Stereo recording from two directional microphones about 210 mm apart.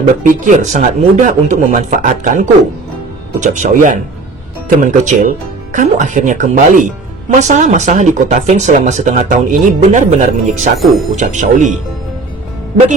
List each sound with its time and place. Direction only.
0.2 s speech: 35° right (ahead or behind)
10.8 s speech: centre (ahead or behind)
11.1 s speech: 35° right (ahead or behind)